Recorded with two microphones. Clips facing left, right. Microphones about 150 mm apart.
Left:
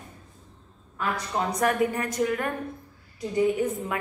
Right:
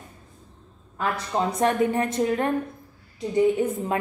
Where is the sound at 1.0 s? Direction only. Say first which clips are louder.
Right 3 dB; 25° right (ahead or behind).